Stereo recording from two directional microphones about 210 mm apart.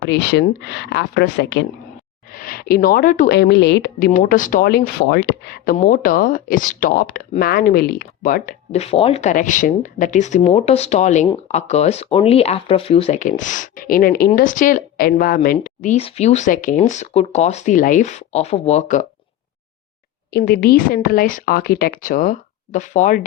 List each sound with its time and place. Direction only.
0.0 s speech: 55° left (ahead or behind)
2.3 s speech: 45° left (ahead or behind)
20.3 s speech: 50° left (ahead or behind)